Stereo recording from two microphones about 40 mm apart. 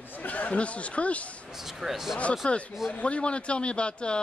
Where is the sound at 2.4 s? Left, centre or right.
Left.